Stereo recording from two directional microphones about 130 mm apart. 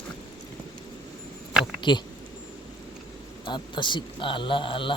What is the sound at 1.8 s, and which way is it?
Speech, 35° left (ahead or behind).